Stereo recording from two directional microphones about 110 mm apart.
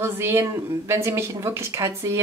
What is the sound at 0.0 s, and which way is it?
Speech, 25° right (ahead or behind).